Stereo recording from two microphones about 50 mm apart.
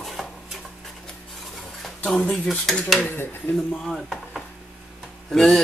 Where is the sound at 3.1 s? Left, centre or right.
Left.